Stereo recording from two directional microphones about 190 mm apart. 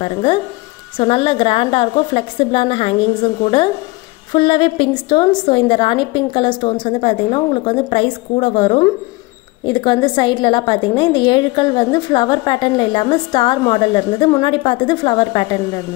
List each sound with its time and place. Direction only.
0.0 s a woman's voice: 25° left (ahead or behind)